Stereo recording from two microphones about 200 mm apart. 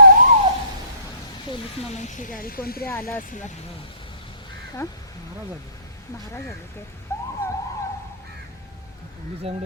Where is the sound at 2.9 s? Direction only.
10° left (ahead or behind).